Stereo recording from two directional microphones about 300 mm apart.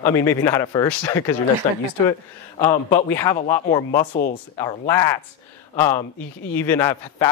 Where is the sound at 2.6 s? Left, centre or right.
Centre.